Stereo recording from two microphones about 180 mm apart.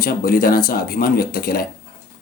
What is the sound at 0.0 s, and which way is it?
Speech, 55° left (ahead or behind).